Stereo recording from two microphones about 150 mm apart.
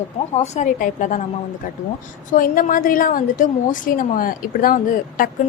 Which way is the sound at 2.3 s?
65° left (ahead or behind).